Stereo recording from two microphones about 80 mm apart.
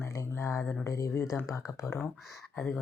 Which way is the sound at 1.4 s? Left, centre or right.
Left.